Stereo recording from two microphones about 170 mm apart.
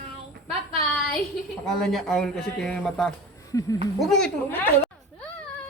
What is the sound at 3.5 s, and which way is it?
Speech, 20° left (ahead or behind).